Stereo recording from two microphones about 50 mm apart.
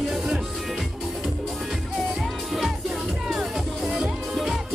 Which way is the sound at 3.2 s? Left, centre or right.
Centre.